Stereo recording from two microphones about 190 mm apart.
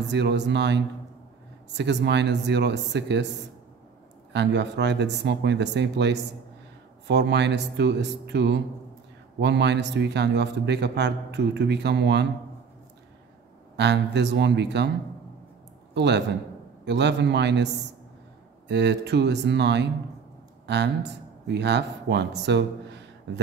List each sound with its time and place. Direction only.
0.1 s a man's voice: 65° right (ahead or behind)
4.3 s a man's voice: 65° right (ahead or behind)
13.7 s a man's voice: 65° right (ahead or behind)
15.9 s a man's voice: 65° right (ahead or behind)
18.7 s a man's voice: 65° right (ahead or behind)